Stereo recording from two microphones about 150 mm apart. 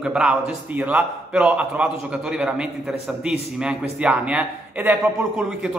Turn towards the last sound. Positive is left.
turn(degrees=-5)  # may be behind; listen again after turning